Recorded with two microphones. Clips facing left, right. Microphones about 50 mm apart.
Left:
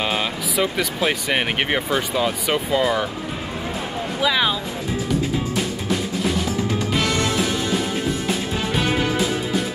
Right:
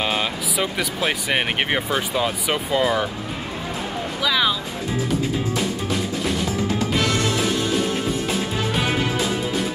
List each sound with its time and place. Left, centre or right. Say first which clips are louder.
0.0 s speech: even; centre
4.2 s speech: left 1 dB; centre